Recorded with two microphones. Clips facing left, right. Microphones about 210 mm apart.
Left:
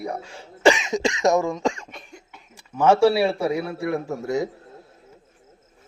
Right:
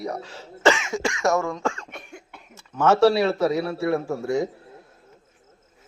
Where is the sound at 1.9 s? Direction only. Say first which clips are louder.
Right 2 dB; 60° right (ahead or behind).